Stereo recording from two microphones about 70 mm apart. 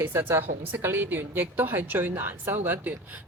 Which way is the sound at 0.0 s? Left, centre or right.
Right.